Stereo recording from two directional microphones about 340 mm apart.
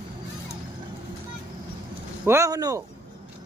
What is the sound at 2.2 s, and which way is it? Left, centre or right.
Speech, centre.